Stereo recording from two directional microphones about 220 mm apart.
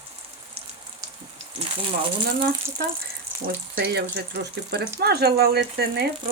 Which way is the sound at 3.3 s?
10° right (ahead or behind).